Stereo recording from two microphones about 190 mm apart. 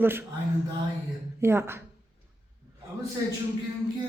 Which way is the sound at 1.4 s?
10° right (ahead or behind).